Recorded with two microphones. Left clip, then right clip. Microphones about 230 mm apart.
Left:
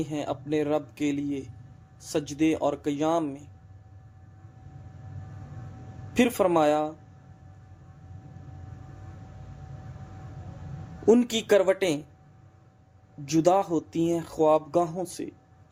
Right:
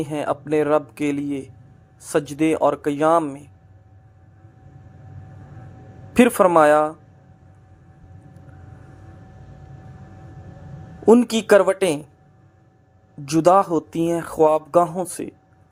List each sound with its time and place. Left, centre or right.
0.0 s speech: right
6.1 s speech: centre
11.0 s speech: right
13.2 s speech: right